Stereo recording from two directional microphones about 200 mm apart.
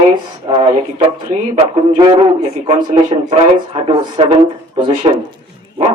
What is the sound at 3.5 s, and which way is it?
Speech, 25° right (ahead or behind).